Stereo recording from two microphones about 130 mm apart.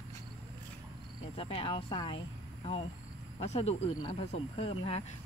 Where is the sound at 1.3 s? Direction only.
45° left (ahead or behind).